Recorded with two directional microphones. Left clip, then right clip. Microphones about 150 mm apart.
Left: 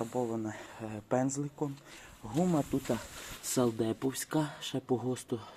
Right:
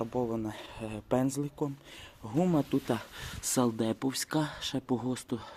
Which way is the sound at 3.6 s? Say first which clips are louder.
Right 1 dB; 35° right (ahead or behind).